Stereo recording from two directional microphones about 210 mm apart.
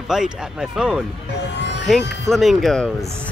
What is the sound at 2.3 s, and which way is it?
Speech, centre (ahead or behind).